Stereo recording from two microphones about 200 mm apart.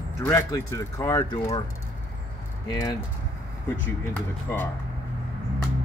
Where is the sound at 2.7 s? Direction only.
20° left (ahead or behind).